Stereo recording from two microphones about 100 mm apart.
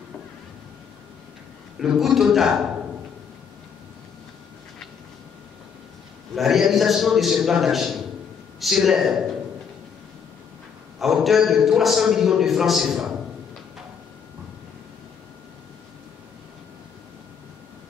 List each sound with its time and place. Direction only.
1.8 s a man's voice: 5° right (ahead or behind)
6.3 s a man's voice: 5° right (ahead or behind)
11.0 s a man's voice: centre (ahead or behind)